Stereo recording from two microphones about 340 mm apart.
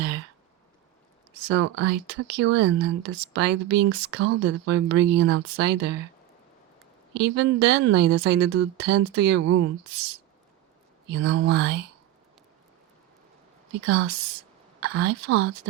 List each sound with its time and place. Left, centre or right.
1.3 s speech: right
7.1 s a woman's voice: right
11.1 s speech: right
13.8 s speech: right